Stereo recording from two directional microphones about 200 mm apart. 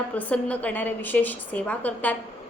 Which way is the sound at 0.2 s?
5° left (ahead or behind).